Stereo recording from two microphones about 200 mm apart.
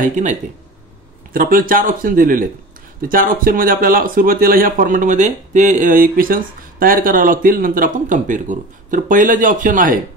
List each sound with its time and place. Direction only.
0.0 s speech: 35° right (ahead or behind)